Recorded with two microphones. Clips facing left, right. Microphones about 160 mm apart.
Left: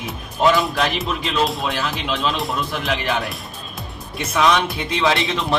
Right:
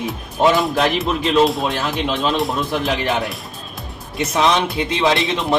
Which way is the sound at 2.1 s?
40° right (ahead or behind).